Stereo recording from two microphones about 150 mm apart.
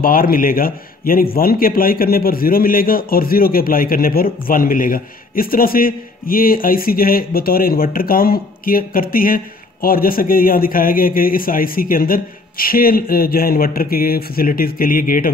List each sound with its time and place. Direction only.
0.0 s a man's voice: 75° left (ahead or behind)